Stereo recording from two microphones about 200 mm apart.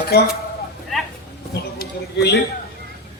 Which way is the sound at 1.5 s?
55° left (ahead or behind).